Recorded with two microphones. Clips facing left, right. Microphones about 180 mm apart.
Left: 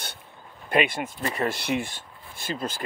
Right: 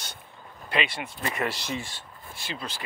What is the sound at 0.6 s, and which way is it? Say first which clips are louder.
Speech: left 6 dB; 50° left (ahead or behind).